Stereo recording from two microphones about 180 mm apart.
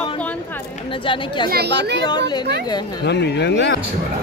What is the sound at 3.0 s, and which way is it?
Speech, 70° left (ahead or behind).